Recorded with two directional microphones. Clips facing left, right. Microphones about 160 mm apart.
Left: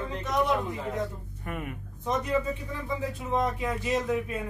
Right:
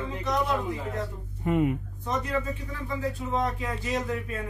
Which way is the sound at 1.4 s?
20° right (ahead or behind).